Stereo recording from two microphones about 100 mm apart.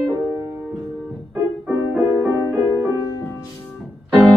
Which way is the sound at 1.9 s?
10° right (ahead or behind).